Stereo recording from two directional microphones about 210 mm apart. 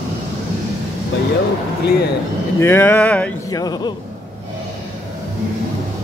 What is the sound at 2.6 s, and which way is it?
Speech, 10° left (ahead or behind).